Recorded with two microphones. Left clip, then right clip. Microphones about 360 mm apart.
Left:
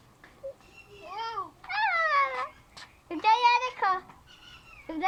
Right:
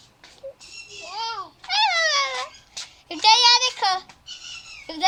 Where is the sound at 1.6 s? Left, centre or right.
Centre.